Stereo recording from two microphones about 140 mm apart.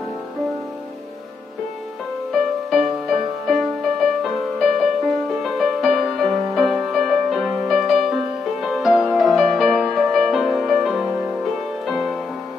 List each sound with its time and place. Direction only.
2.3 s music: centre (ahead or behind)